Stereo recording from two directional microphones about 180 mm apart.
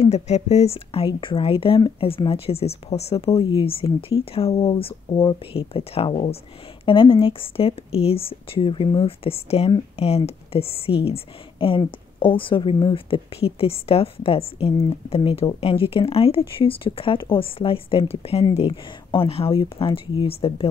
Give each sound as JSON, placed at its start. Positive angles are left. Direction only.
{"t": 0.0, "sound": "a woman's voice", "side_deg": 40}